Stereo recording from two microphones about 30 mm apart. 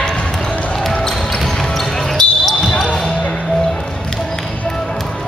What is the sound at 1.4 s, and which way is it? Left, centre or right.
Basketball bounce, centre.